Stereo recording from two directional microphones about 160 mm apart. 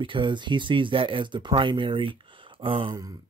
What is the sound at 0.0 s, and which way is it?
Speech, 30° right (ahead or behind).